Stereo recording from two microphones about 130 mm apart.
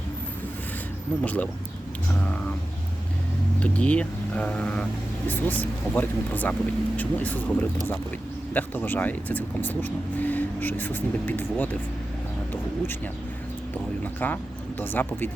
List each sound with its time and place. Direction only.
1.2 s speech: 10° left (ahead or behind)
3.6 s speech: 10° left (ahead or behind)
13.7 s speech: 15° left (ahead or behind)